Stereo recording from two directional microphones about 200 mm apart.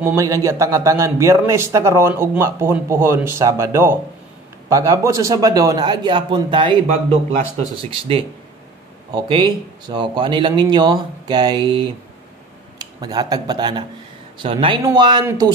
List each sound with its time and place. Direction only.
0.0 s a man's voice: 15° right (ahead or behind)